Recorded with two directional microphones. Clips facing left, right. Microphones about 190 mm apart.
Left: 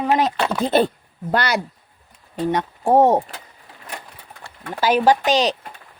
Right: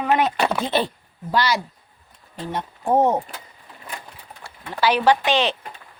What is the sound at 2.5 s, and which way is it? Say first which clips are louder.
Speech: left 4 dB; 85° left.